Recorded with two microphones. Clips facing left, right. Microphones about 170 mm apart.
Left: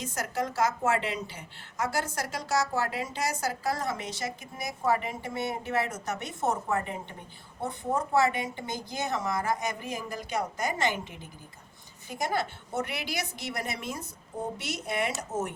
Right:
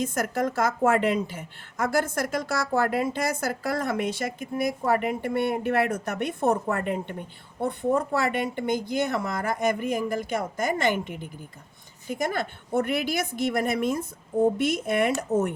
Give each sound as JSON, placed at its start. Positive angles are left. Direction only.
{"t": 0.0, "sound": "a woman's voice", "side_deg": -50}